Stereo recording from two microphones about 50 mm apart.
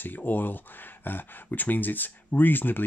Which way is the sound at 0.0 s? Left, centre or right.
Left.